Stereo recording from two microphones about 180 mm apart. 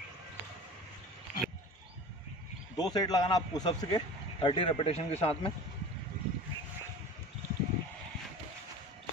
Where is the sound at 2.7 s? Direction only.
20° left (ahead or behind).